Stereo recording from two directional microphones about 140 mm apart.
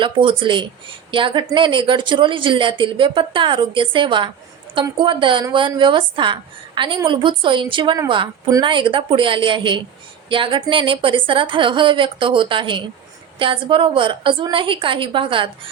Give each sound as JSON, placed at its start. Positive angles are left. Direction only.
{"t": 0.0, "sound": "a woman's voice", "side_deg": -40}